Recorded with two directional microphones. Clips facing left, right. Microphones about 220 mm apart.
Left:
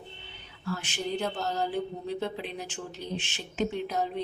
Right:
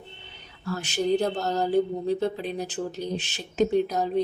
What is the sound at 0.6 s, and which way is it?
Speech, 40° right (ahead or behind).